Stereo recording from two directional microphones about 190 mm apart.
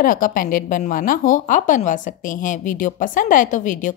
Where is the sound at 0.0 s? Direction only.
45° left (ahead or behind).